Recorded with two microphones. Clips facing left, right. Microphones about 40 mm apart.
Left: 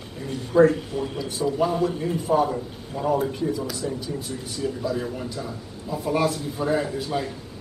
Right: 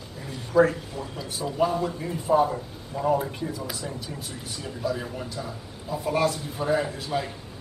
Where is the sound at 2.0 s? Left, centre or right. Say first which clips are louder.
Left 1 dB; left.